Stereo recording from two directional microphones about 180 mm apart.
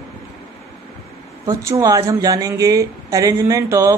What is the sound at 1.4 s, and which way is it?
Speech, 20° right (ahead or behind).